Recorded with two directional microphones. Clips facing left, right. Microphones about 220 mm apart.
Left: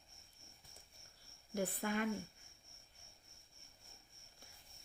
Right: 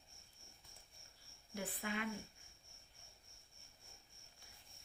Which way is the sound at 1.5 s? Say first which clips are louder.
Left 5 dB; 45° left (ahead or behind).